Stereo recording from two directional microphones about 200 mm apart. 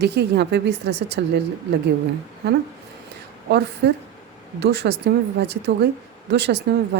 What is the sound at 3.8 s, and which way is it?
A woman's voice, 55° right (ahead or behind).